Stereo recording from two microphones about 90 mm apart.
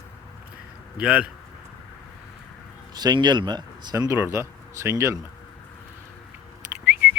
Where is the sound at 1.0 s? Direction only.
10° right (ahead or behind).